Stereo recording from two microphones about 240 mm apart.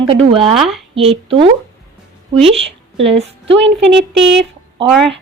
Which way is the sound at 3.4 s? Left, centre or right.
Right.